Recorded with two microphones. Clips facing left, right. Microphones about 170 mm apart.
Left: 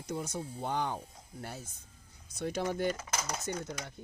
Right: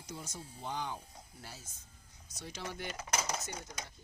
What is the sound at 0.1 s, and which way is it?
Speech, 55° left (ahead or behind).